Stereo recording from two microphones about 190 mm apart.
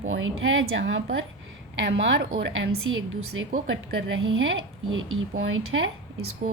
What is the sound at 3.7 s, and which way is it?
Speech, 85° right.